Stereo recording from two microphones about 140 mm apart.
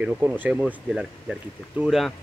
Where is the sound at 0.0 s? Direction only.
10° right (ahead or behind).